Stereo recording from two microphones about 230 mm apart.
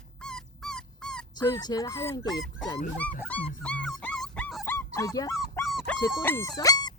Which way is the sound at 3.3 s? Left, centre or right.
Centre.